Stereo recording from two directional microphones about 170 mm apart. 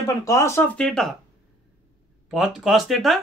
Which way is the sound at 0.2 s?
20° left (ahead or behind).